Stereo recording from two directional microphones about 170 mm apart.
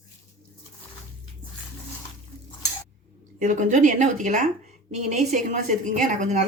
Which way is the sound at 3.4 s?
50° right (ahead or behind).